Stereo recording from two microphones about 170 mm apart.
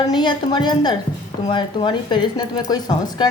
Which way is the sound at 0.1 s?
25° left (ahead or behind).